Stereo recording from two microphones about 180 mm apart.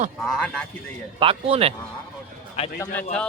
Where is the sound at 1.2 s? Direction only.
30° right (ahead or behind).